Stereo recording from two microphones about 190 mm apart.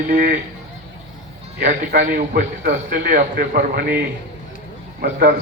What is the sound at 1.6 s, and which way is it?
A man's voice, 45° right (ahead or behind).